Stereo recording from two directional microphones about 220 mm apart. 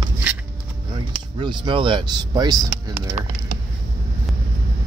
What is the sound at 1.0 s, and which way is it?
Speech, 20° right (ahead or behind).